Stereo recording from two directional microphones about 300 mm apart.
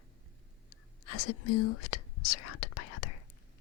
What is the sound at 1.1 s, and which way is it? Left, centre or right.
Speech, left.